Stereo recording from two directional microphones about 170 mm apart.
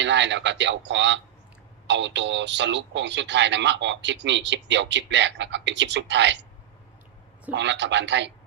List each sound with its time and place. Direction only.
0.0 s speech: 90° right
7.5 s speech: 90° right